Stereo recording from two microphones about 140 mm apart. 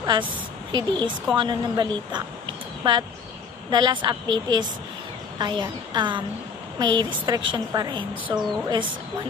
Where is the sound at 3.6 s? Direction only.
30° right (ahead or behind).